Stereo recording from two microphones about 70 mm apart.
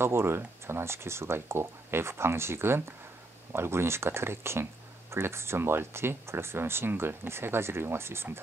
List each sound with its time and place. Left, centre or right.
0.0 s speech: right